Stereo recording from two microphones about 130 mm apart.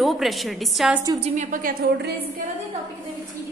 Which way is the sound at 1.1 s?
55° right (ahead or behind).